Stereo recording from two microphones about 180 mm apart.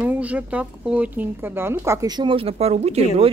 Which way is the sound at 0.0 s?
10° right (ahead or behind).